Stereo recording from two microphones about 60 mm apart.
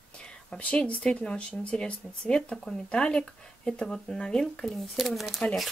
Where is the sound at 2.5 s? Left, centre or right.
Centre.